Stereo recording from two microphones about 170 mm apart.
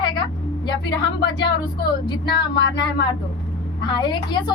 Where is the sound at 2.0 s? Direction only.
25° left (ahead or behind).